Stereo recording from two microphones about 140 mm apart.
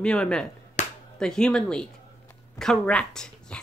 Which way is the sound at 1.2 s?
5° left (ahead or behind).